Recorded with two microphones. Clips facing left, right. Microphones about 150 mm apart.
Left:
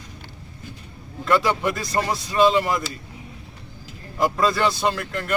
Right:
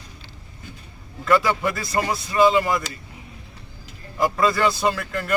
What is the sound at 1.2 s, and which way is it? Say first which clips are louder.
A man's voice: right 1 dB; centre (ahead or behind).